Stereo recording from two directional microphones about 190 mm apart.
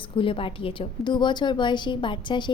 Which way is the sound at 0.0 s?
25° left (ahead or behind).